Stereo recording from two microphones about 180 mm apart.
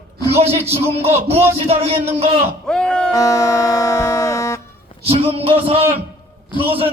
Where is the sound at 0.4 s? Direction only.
35° right (ahead or behind).